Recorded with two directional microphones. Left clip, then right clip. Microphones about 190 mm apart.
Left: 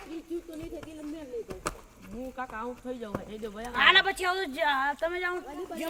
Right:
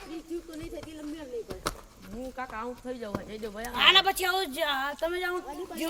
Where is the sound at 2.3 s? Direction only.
40° left (ahead or behind).